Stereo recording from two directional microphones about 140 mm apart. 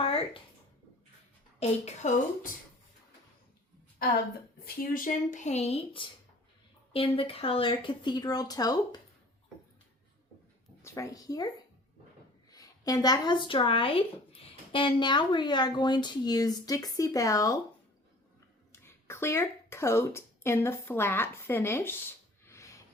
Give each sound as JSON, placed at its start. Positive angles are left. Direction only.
{"t": 0.0, "sound": "a sound", "side_deg": 40}
{"t": 1.5, "sound": "speech", "side_deg": 55}
{"t": 4.6, "sound": "speech", "side_deg": 90}
{"t": 10.8, "sound": "speech", "side_deg": 20}
{"t": 12.5, "sound": "a woman's voice", "side_deg": 25}
{"t": 18.7, "sound": "speech", "side_deg": 20}
{"t": 22.4, "sound": "a sound", "side_deg": 20}